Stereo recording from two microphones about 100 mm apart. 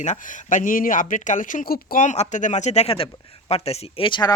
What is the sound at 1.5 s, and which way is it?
Speech, 90° left.